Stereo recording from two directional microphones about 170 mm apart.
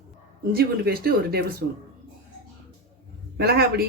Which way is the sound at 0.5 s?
65° right (ahead or behind).